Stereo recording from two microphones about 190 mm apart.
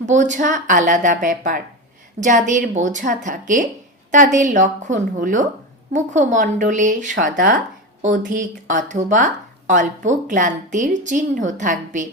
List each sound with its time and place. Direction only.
0.0 s a woman's voice: 40° right (ahead or behind)